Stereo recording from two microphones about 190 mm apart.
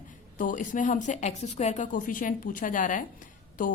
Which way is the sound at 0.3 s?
45° left (ahead or behind).